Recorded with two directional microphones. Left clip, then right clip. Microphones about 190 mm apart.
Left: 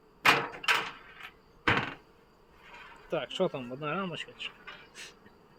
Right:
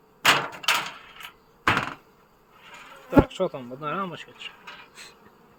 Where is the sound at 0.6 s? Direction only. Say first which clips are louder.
Right 4 dB; 50° right (ahead or behind).